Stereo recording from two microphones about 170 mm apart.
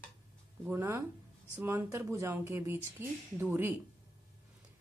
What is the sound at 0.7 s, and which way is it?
A woman's voice, 15° right (ahead or behind).